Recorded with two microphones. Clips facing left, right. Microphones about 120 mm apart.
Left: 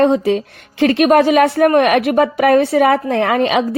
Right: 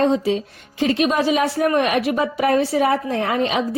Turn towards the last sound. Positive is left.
turn(degrees=70)  # may be behind; listen again after turning